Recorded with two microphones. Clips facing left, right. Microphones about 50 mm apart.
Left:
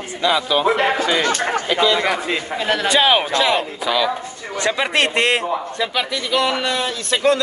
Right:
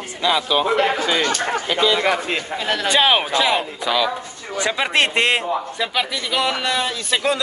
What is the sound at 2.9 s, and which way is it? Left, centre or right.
Speech, centre.